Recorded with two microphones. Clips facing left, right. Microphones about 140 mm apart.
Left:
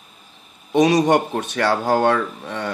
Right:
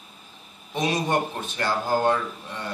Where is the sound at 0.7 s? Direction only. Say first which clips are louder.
Left 9 dB; 75° left (ahead or behind).